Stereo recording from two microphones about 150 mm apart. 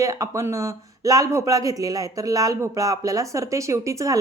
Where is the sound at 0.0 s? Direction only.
20° right (ahead or behind).